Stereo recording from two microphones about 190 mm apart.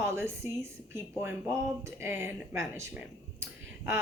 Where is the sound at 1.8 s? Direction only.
15° right (ahead or behind).